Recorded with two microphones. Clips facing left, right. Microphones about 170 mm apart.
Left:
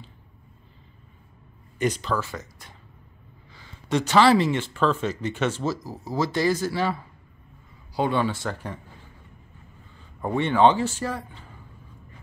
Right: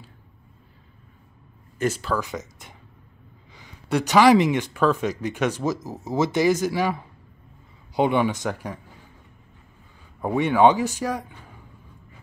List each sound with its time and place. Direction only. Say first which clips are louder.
1.8 s speech: right 1 dB; 5° right (ahead or behind)
2.2 s speech: right 4 dB; 20° right (ahead or behind)
10.2 s speech: right 2 dB; 10° right (ahead or behind)